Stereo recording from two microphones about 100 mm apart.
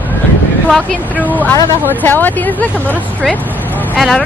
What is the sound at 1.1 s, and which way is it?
Speech, 15° left (ahead or behind).